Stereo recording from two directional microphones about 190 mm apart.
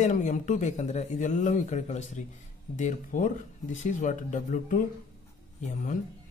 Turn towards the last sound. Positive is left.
turn(degrees=40)  # may be behind; listen again after turning